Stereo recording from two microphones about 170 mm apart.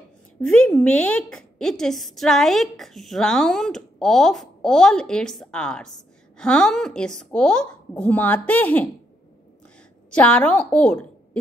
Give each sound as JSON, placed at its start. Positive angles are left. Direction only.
{"t": 0.4, "sound": "a woman's voice", "side_deg": 5}
{"t": 10.1, "sound": "a woman's voice", "side_deg": 5}